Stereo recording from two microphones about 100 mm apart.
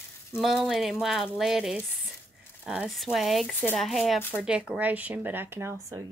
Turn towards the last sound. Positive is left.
turn(degrees=-25)  # may be behind; listen again after turning